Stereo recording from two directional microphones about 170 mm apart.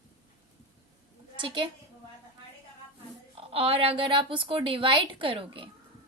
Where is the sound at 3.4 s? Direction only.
35° right (ahead or behind).